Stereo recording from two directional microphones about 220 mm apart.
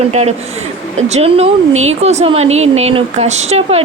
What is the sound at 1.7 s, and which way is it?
Speech, 65° right (ahead or behind).